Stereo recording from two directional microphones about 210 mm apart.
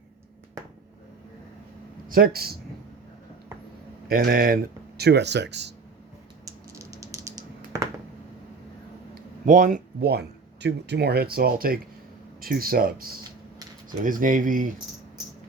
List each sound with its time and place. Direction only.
2.0 s speech: 45° right (ahead or behind)
4.1 s speech: 45° right (ahead or behind)
6.4 s typing: 15° right (ahead or behind)
9.1 s speech: 35° right (ahead or behind)